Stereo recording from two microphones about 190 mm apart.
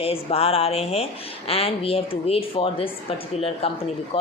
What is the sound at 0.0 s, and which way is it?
A woman's voice, 30° left (ahead or behind).